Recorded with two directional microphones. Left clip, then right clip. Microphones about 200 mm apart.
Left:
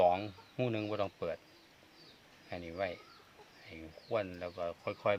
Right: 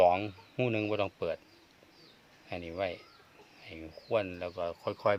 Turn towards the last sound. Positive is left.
turn(degrees=-35)  # may be behind; listen again after turning